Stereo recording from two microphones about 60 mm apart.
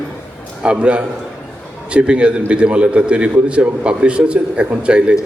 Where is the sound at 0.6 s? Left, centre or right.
Centre.